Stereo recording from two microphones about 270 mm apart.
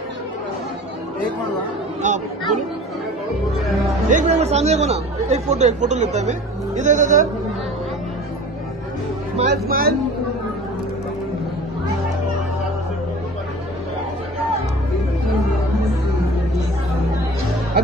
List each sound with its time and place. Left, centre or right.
2.0 s speech: right
4.1 s speech: right
9.5 s speech: right